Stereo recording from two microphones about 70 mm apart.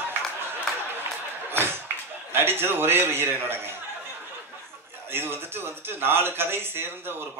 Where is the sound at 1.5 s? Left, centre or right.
Right.